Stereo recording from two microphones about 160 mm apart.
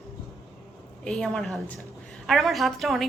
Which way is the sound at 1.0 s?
Centre (ahead or behind).